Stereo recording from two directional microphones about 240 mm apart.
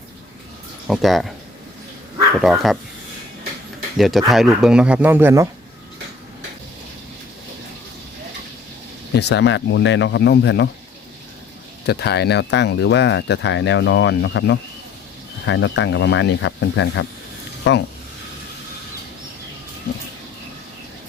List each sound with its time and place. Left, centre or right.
0.9 s speech: centre
2.4 s speech: centre
3.9 s speech: centre
9.1 s speech: left
11.9 s speech: left